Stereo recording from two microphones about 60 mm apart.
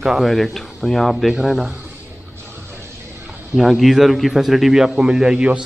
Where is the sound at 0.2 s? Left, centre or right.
Centre.